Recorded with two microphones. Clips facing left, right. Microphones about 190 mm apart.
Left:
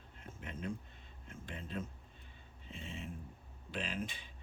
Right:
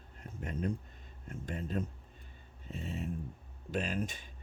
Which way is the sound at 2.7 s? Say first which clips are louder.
Right 7 dB; 40° right (ahead or behind).